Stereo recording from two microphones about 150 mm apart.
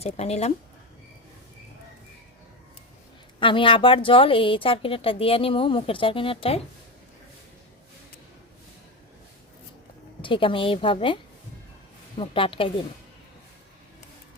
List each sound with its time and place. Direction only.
0.0 s speech: 45° left (ahead or behind)
3.4 s speech: 35° left (ahead or behind)
10.2 s speech: 35° left (ahead or behind)
12.2 s speech: 35° left (ahead or behind)